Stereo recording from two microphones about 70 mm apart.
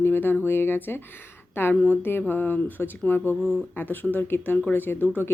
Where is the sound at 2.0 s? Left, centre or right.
Left.